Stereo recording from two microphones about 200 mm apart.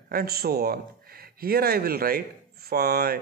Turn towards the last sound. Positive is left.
turn(degrees=-50)  # may be behind; listen again after turning